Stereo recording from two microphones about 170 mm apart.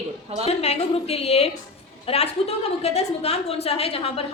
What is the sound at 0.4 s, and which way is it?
A woman's voice, 35° left (ahead or behind).